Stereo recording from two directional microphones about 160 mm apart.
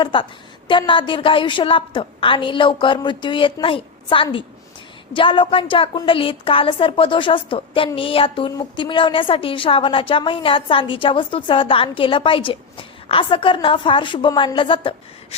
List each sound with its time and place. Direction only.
0.0 s a woman's voice: 30° left (ahead or behind)